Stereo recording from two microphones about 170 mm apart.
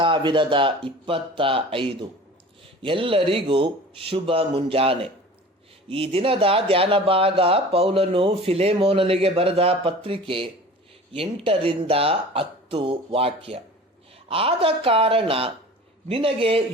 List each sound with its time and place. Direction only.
0.0 s speech: 30° right (ahead or behind)